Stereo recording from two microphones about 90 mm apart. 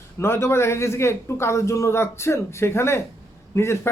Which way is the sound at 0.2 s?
30° left (ahead or behind).